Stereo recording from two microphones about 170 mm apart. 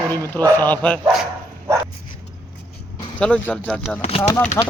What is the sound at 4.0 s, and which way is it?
Speech, 35° left (ahead or behind).